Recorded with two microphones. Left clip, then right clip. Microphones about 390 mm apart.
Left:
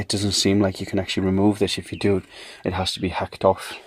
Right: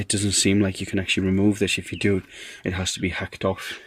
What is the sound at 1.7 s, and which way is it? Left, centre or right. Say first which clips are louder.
Speech: right 1 dB; centre.